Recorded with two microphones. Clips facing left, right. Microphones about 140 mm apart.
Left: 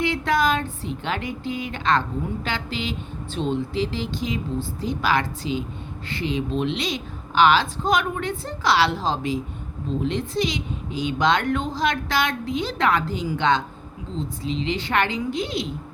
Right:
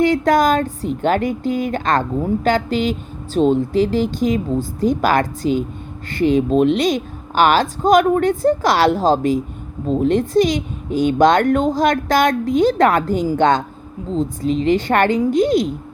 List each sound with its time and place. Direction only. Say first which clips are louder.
0.0 s a woman's voice: right 8 dB; 45° right (ahead or behind)